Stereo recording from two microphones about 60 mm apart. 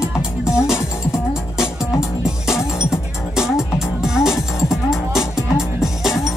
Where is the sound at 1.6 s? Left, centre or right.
Centre.